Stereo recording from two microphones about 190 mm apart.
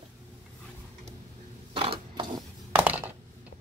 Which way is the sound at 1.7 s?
30° right (ahead or behind).